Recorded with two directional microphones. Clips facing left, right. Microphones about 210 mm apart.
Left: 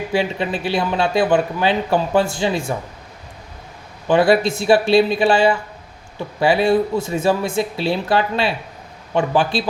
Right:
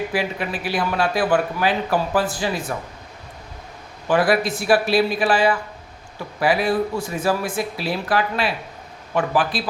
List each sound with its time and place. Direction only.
0.1 s speech: 25° left (ahead or behind)
4.1 s speech: 25° left (ahead or behind)